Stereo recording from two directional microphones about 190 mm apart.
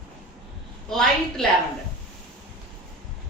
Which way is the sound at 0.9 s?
Centre (ahead or behind).